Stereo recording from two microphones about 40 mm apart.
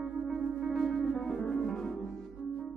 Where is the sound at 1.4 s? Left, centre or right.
Left.